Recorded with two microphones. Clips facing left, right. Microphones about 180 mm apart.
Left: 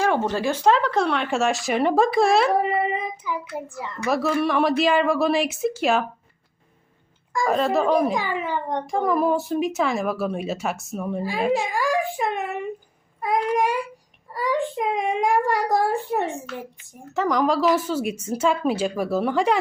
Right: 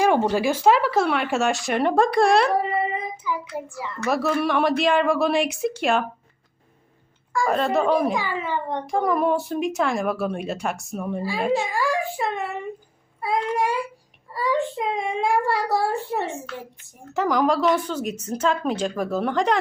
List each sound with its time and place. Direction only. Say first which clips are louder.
0.0 s speech: right 2 dB; 15° right (ahead or behind)
2.6 s child singing: left 2 dB; 20° left (ahead or behind)
3.5 s speech: even; 15° left (ahead or behind)
4.0 s speech: even; centre (ahead or behind)
7.4 s speech: left 1 dB; centre (ahead or behind)
8.1 s speech: left 1 dB; 15° left (ahead or behind)
8.9 s speech: even; centre (ahead or behind)
11.7 s speech: left 1 dB; 15° left (ahead or behind)
17.2 s speech: even; centre (ahead or behind)